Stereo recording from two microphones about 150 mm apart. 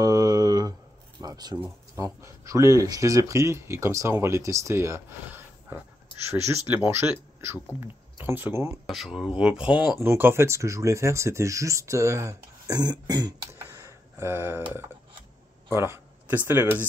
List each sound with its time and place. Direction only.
0.0 s a sound: 25° right (ahead or behind)
1.6 s speech: 20° right (ahead or behind)
8.8 s speech: centre (ahead or behind); by 13.6 s 25° right (ahead or behind)
13.6 s tick: 20° right (ahead or behind)
15.7 s speech: 15° right (ahead or behind)